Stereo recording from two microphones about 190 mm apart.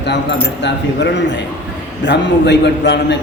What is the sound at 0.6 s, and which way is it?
A man's voice, 70° left (ahead or behind).